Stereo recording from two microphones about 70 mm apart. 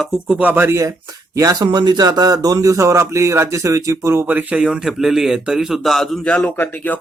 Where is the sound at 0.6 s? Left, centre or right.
Right.